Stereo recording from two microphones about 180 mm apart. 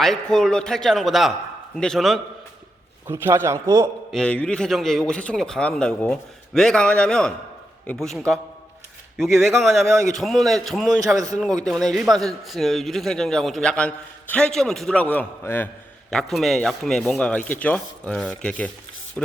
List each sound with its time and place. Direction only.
0.0 s a man's voice: centre (ahead or behind)
3.1 s a man's voice: 15° right (ahead or behind)
4.1 s a man's voice: 5° left (ahead or behind)